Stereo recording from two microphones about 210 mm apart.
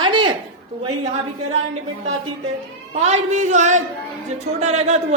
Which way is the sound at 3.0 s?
35° right (ahead or behind).